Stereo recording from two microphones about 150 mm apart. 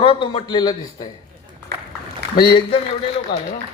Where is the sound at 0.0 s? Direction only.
35° left (ahead or behind).